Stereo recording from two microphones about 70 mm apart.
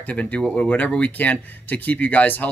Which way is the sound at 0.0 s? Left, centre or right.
Left.